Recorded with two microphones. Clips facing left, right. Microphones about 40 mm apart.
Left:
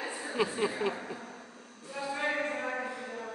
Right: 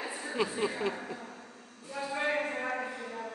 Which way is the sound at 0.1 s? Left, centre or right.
Centre.